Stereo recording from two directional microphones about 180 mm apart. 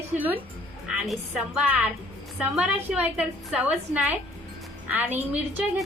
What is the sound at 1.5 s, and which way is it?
A woman's voice, 10° right (ahead or behind).